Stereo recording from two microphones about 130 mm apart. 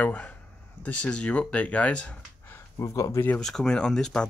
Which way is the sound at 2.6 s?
25° left (ahead or behind).